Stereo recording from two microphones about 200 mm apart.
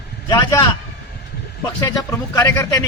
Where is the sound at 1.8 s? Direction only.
15° left (ahead or behind).